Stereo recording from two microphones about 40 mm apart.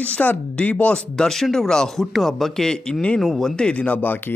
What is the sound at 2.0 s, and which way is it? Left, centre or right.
Speech, centre.